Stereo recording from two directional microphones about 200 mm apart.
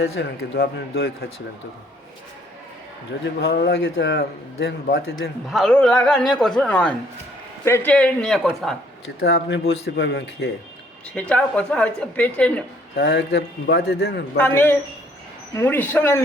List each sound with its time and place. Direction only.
0.0 s a man's voice: 65° left (ahead or behind)
3.4 s a man's voice: 55° left (ahead or behind)
5.5 s a man's voice: 5° left (ahead or behind)
9.2 s a man's voice: 55° left (ahead or behind)
11.1 s a woman's voice: 5° left (ahead or behind)
13.0 s a man's voice: 60° left (ahead or behind)
14.3 s a woman's voice: 10° left (ahead or behind)